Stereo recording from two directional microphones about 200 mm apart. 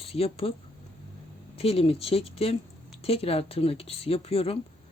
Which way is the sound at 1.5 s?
30° left (ahead or behind).